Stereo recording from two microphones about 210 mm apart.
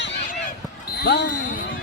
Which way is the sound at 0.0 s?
55° left (ahead or behind).